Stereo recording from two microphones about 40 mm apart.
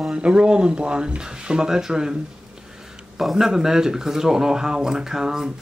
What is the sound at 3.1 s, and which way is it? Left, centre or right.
Speech, centre.